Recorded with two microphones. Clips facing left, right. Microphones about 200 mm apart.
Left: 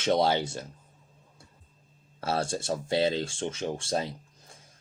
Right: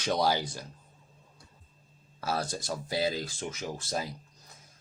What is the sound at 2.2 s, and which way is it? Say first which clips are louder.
Speech: left 3 dB; 25° left (ahead or behind).